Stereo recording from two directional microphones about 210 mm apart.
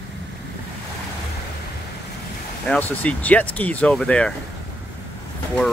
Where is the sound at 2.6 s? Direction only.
5° left (ahead or behind).